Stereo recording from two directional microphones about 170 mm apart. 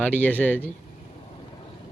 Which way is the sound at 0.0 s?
10° left (ahead or behind).